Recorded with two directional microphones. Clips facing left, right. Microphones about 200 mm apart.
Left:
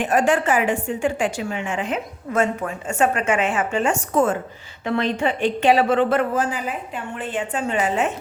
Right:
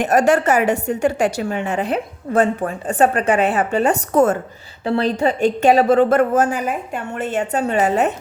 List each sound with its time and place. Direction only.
0.0 s a woman's voice: 40° right (ahead or behind)